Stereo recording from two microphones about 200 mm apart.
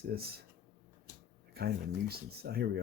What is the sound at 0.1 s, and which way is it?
Speech, 50° right (ahead or behind).